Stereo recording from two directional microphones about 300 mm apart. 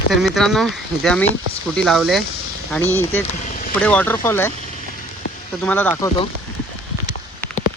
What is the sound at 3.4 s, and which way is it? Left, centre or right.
Vehicle, left.